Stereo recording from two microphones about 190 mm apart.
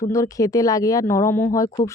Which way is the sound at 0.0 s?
15° left (ahead or behind).